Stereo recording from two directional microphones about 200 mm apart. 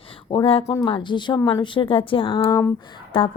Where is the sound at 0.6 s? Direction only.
15° left (ahead or behind).